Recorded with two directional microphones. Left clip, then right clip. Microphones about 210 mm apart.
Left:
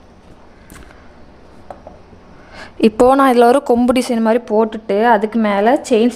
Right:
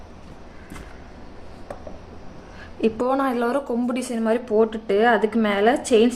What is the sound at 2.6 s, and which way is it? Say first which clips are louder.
A woman's voice: left 11 dB; 60° left (ahead or behind).